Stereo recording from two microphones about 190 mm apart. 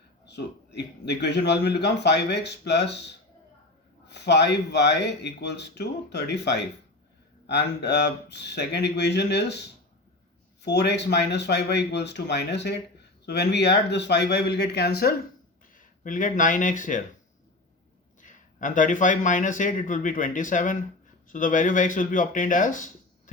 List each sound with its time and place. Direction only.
0.3 s speech: 60° left (ahead or behind)
4.1 s speech: 60° left (ahead or behind)
15.7 s speech: 45° left (ahead or behind)
18.2 s speech: 40° left (ahead or behind)